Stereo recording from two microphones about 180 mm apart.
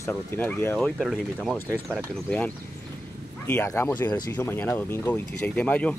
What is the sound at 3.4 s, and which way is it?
Speech, 15° left (ahead or behind).